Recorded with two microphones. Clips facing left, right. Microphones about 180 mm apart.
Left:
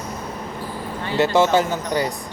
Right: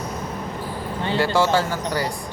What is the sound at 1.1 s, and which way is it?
Speech, 20° left (ahead or behind).